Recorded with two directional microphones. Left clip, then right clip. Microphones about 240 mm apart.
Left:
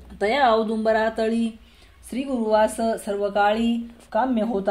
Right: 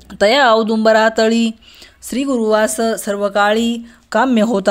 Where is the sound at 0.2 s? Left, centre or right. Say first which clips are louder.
Right 8 dB; right.